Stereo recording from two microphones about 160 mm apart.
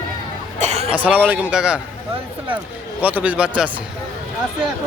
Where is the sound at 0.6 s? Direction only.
40° right (ahead or behind).